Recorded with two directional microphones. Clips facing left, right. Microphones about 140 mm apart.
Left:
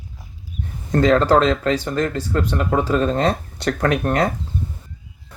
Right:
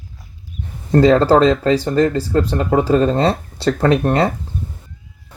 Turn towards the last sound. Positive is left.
turn(degrees=-30)  # may be behind; listen again after turning